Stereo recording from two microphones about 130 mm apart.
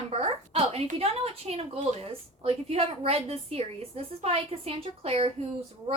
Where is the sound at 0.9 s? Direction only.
50° right (ahead or behind).